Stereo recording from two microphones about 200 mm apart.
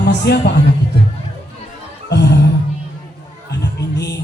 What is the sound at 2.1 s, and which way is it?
Music, 55° left (ahead or behind).